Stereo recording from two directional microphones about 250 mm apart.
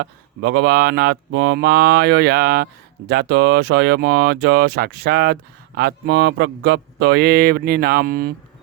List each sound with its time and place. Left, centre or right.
0.0 s speech: right